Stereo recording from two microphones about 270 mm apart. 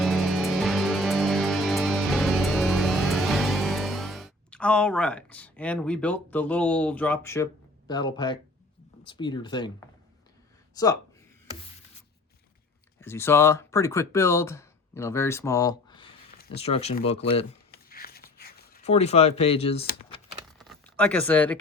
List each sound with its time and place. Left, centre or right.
0.0 s music: centre
7.9 s speech: centre
10.8 s speech: centre
13.0 s speech: centre
17.7 s a sound: left
18.8 s speech: left
20.6 s a sound: centre